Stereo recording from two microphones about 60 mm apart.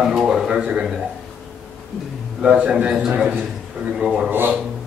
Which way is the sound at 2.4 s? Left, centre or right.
Centre.